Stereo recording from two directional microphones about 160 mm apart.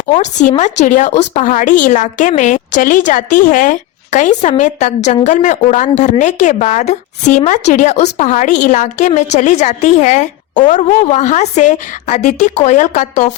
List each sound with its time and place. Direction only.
0.1 s speech: 50° left (ahead or behind)